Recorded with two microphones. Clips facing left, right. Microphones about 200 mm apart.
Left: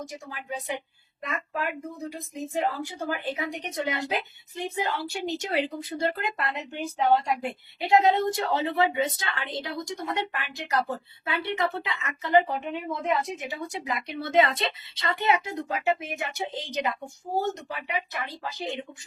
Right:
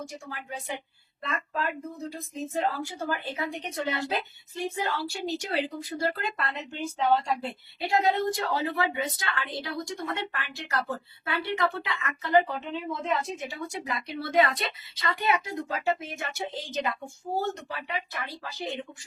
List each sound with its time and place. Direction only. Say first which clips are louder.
1.2 s a woman's voice: even; 15° left (ahead or behind)